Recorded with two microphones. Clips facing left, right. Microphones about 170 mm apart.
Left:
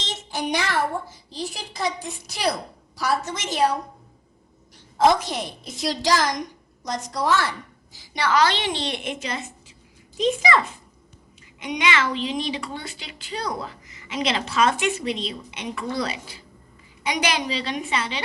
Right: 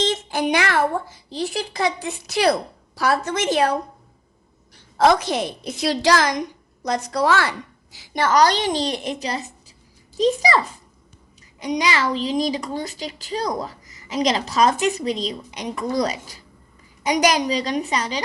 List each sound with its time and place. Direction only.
0.3 s a sound: 75° right (ahead or behind)
1.3 s a woman's voice: 65° right (ahead or behind)
4.9 s a woman's voice: 80° right
8.1 s a woman's voice: 45° right (ahead or behind)
11.6 s a woman's voice: 35° right (ahead or behind)